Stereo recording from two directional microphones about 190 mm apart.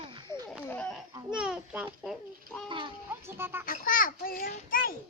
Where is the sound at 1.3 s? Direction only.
5° right (ahead or behind).